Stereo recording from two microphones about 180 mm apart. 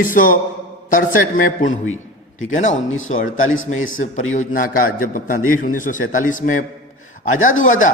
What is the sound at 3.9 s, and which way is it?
A man's voice, 45° left (ahead or behind).